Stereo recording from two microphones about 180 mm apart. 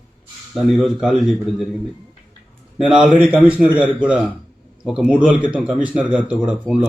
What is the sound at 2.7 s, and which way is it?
Speech, centre (ahead or behind).